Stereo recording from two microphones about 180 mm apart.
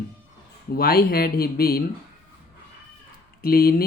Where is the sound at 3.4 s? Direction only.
60° left (ahead or behind).